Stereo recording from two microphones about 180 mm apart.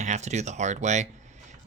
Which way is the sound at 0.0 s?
40° right (ahead or behind).